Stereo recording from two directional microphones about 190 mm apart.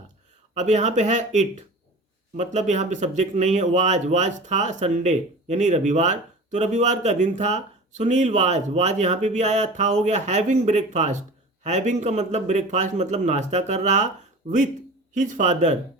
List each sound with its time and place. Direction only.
0.5 s speech: 40° right (ahead or behind)